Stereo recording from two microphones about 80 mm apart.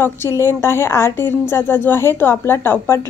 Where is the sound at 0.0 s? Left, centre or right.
Left.